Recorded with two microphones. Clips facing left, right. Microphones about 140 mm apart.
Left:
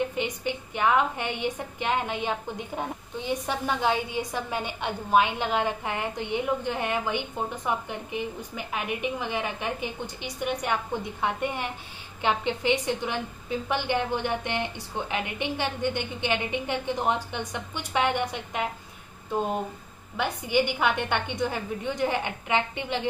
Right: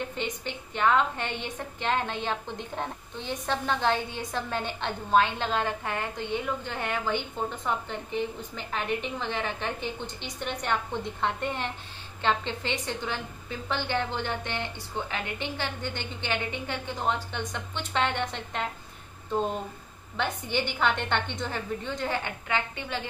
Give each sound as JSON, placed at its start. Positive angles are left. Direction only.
{"t": 0.1, "sound": "a woman's voice", "side_deg": 15}
{"t": 20.2, "sound": "a woman's voice", "side_deg": 10}